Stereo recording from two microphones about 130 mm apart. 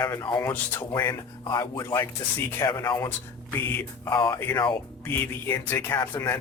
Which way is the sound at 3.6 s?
15° left (ahead or behind).